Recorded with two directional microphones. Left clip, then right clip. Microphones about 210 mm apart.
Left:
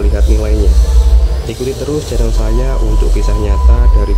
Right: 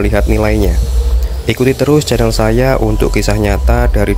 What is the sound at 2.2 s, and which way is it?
Speech, 50° right (ahead or behind).